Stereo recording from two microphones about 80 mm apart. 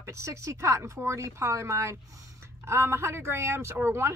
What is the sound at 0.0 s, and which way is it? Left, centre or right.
A woman's voice, right.